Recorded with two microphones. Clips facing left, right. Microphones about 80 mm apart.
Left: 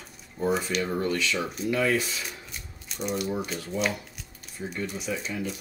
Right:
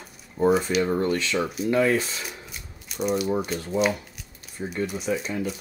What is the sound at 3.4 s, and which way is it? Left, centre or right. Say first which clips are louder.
Speech: right 5 dB; centre.